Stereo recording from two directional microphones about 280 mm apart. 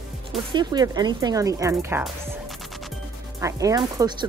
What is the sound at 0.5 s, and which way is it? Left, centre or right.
Speech, centre.